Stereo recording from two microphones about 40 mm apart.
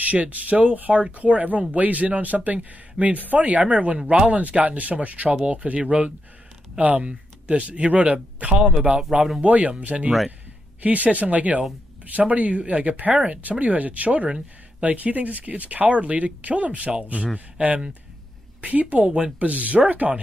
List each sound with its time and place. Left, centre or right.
0.0 s speech: right
18.6 s speech: right